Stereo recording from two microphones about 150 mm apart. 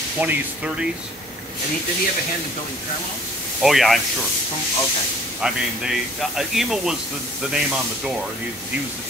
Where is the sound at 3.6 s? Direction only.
Centre (ahead or behind).